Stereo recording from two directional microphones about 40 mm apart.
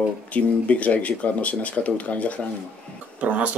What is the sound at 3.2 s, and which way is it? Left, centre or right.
Speech, right.